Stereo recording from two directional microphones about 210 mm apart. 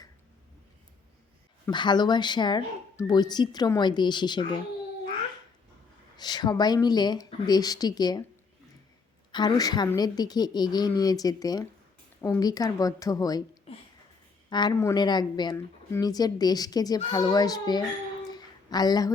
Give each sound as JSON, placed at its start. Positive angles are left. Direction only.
{"t": 1.6, "sound": "a woman's voice", "side_deg": 20}
{"t": 6.1, "sound": "a woman's voice", "side_deg": 20}
{"t": 9.3, "sound": "a woman's voice", "side_deg": 20}
{"t": 18.3, "sound": "a sound", "side_deg": 20}